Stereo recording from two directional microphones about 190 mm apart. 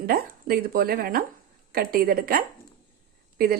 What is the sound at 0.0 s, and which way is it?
Speech, 50° right (ahead or behind).